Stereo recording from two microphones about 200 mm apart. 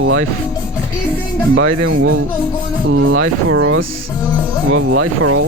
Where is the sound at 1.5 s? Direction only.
90° right.